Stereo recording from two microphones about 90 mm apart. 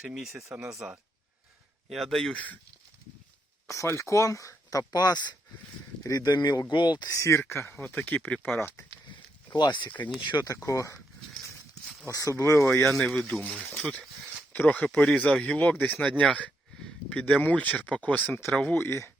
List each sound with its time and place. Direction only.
0.0 s speech: 5° right (ahead or behind)
1.9 s speech: 5° left (ahead or behind)
3.7 s speech: 35° left (ahead or behind); by 7.1 s 55° left (ahead or behind)
7.1 s speech: 35° left (ahead or behind)
9.0 s a sound: 55° left (ahead or behind)
10.3 s speech: 40° left (ahead or behind)
12.0 s speech: 35° left (ahead or behind)
12.8 s speech: 5° left (ahead or behind); by 19.1 s 25° left (ahead or behind)